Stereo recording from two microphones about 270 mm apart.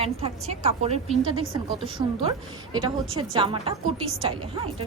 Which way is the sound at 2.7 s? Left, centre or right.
Centre.